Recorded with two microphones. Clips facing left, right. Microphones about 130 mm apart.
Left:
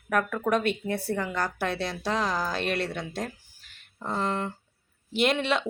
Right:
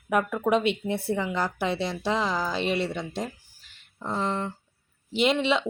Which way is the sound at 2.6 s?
55° left (ahead or behind).